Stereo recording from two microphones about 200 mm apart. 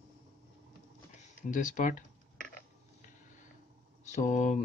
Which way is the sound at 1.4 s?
40° left (ahead or behind).